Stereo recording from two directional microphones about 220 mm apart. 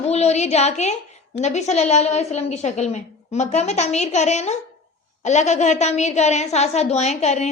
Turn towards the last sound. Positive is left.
turn(degrees=30)  # may be behind; listen again after turning